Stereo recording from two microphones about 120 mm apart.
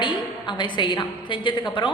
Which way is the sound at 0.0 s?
40° left (ahead or behind).